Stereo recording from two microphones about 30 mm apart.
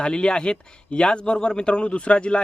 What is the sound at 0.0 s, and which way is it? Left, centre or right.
Speech, left.